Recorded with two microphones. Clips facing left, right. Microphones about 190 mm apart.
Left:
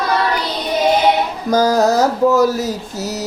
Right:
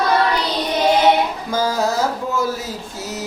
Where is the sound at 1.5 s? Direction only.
40° left (ahead or behind).